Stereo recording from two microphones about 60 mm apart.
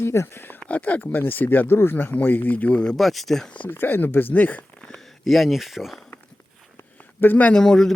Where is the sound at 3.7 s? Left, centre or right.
Left.